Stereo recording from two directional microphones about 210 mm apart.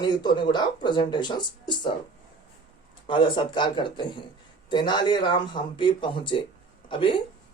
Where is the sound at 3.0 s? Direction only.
25° left (ahead or behind).